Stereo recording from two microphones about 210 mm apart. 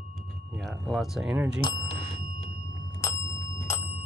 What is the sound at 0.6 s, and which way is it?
Cutlery, centre (ahead or behind).